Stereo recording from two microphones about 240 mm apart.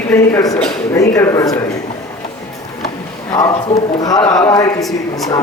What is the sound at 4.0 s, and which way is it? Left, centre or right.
Speech, centre.